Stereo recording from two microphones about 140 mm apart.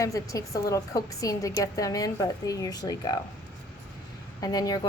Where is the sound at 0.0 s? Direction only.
25° left (ahead or behind).